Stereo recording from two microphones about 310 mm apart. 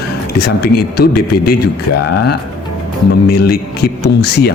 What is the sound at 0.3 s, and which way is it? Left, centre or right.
Speech, left.